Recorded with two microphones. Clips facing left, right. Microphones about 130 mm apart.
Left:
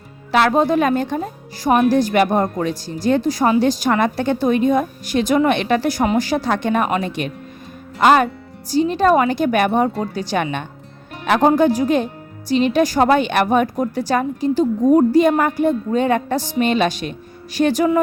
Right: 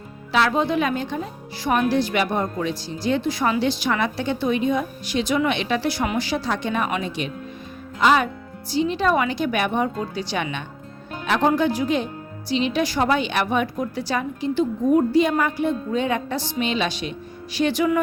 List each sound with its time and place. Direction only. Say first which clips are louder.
0.3 s a woman's voice: left 5 dB; 50° left (ahead or behind)